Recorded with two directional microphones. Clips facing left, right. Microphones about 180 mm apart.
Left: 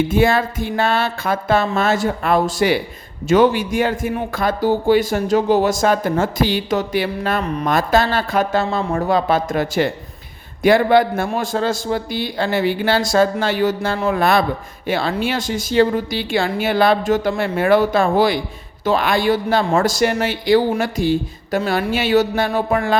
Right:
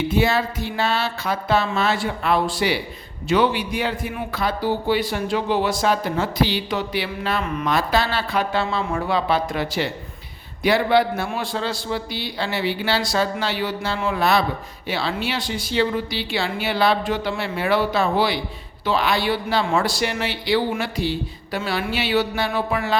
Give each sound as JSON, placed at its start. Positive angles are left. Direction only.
{"t": 0.1, "sound": "a man's voice", "side_deg": 50}